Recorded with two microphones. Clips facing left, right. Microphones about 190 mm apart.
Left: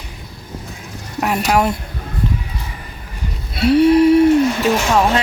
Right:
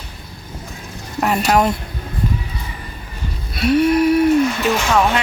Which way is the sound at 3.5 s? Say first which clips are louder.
Left 3 dB; 30° left (ahead or behind).